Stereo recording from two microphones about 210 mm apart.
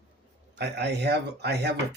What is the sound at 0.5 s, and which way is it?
A man's voice, 55° right (ahead or behind).